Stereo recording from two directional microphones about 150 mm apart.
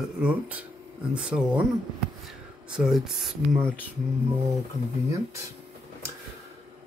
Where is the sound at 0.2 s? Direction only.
10° right (ahead or behind).